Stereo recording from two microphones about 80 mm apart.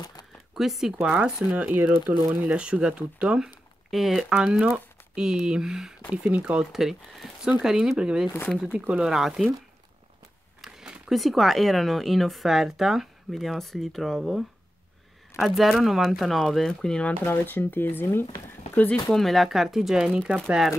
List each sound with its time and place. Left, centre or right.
0.0 s a sound: left
0.6 s speech: centre
1.0 s speech: centre
9.1 s speech: centre
10.6 s speech: centre
17.2 s speech: left
19.1 s speech: centre